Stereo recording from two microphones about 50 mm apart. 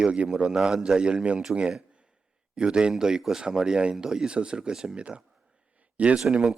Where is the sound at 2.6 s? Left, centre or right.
Centre.